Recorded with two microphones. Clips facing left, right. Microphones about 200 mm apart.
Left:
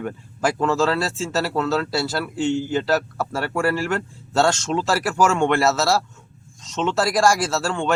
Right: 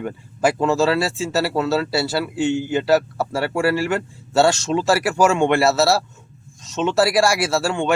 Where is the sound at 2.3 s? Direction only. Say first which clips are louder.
Even; 60° right (ahead or behind).